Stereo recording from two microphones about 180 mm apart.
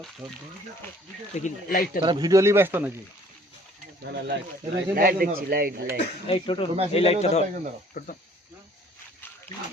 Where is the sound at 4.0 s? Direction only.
70° right (ahead or behind).